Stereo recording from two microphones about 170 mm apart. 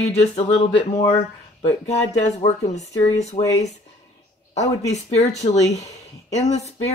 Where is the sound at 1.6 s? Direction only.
40° left (ahead or behind).